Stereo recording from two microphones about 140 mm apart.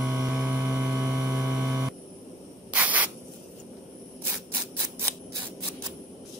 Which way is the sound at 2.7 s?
10° right (ahead or behind).